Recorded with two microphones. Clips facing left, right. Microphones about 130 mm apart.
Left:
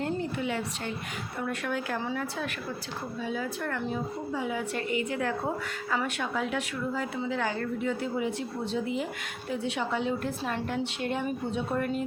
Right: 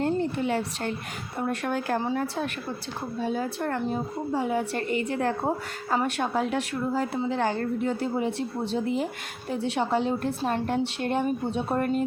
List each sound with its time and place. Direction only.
0.0 s a woman's voice: 35° right (ahead or behind)
9.5 s a woman's voice: 35° right (ahead or behind)